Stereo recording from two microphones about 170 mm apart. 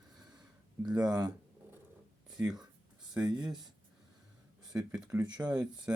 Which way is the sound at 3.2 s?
25° right (ahead or behind).